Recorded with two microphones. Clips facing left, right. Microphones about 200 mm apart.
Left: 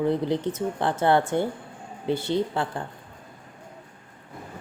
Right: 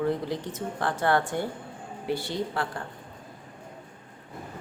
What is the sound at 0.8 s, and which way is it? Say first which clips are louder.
Speech: left 3 dB; 25° left (ahead or behind).